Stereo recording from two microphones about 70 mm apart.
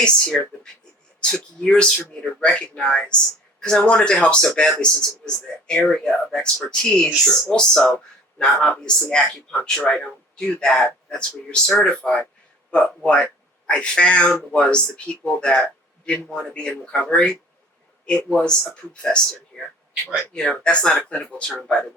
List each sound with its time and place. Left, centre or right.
0.0 s speech: centre
19.9 s speech: centre
20.3 s speech: centre